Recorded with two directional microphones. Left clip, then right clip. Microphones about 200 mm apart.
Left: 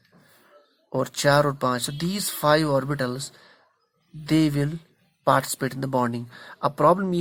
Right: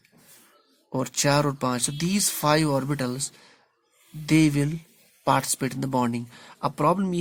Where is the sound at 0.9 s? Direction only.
20° right (ahead or behind).